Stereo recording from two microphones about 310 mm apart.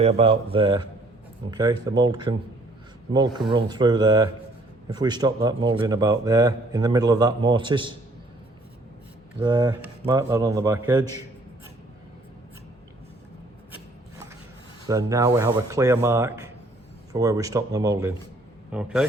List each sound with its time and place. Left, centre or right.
0.0 s speech: centre
9.4 s speech: centre
14.8 s a man's voice: centre